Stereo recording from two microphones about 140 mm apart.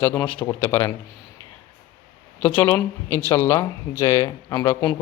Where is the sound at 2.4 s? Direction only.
15° left (ahead or behind).